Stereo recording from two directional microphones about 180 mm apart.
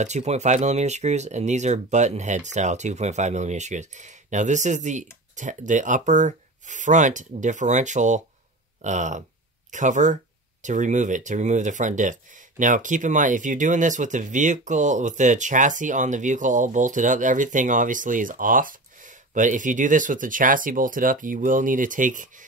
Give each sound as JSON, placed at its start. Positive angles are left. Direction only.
{"t": 0.0, "sound": "speech", "side_deg": -40}